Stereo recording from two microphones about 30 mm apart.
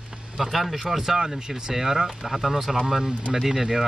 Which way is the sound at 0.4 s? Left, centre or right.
Centre.